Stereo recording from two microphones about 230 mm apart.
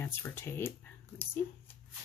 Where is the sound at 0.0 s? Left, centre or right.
Centre.